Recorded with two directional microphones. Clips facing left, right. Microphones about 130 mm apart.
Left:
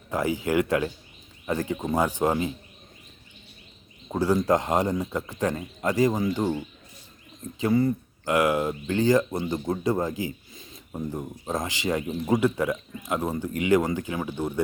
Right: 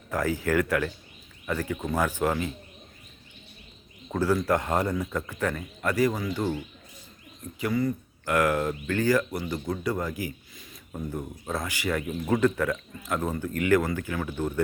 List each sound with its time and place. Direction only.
0.1 s speech: 15° left (ahead or behind)
4.1 s speech: 15° left (ahead or behind)
7.6 s speech: 25° left (ahead or behind)
8.3 s speech: 15° left (ahead or behind)